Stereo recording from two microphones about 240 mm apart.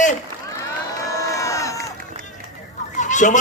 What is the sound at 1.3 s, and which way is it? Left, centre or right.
Crowd, centre.